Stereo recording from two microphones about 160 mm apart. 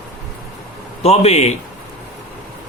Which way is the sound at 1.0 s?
40° left (ahead or behind).